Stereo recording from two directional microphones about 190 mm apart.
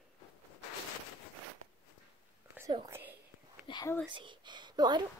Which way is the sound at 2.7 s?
20° right (ahead or behind).